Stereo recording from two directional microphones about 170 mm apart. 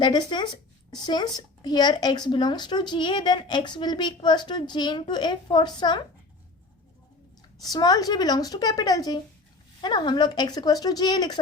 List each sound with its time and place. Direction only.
0.0 s a woman's voice: 25° left (ahead or behind)
7.6 s a woman's voice: 25° left (ahead or behind)